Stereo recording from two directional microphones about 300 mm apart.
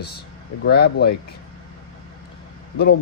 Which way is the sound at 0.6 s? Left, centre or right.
Left.